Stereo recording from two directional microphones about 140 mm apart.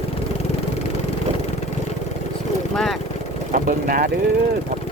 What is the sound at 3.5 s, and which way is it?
Vehicle, 80° right.